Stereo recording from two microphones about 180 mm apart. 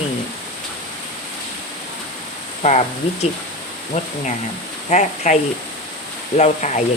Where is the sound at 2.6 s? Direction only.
40° left (ahead or behind).